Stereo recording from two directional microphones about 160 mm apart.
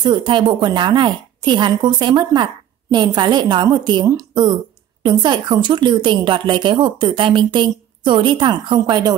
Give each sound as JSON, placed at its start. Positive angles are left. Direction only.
{"t": 0.0, "sound": "a woman's voice", "side_deg": -30}